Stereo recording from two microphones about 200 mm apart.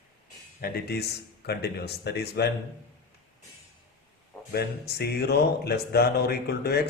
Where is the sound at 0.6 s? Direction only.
55° left (ahead or behind).